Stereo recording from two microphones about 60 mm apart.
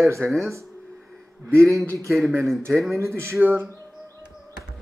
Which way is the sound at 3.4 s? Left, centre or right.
Right.